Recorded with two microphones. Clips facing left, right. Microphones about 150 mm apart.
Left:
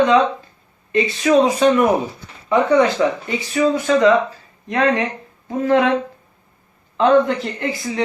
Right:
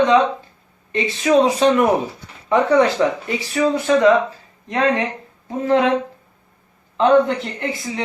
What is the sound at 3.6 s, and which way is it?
Speech, 35° right (ahead or behind).